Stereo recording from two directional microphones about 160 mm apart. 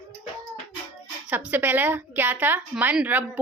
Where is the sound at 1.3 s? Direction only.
10° right (ahead or behind).